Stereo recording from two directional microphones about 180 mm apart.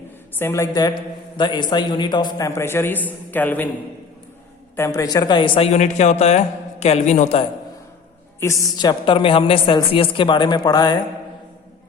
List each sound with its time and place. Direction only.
0.3 s a man's voice: 15° left (ahead or behind)
4.8 s a woman's voice: 20° left (ahead or behind); by 7.4 s 40° left (ahead or behind)
8.4 s a man's voice: 15° left (ahead or behind)
8.9 s speech: 30° left (ahead or behind)